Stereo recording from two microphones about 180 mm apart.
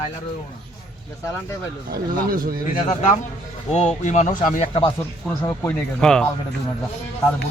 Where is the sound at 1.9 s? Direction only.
55° right (ahead or behind).